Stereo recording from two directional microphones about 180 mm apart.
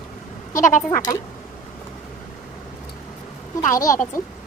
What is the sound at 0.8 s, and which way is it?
Speech, 10° left (ahead or behind).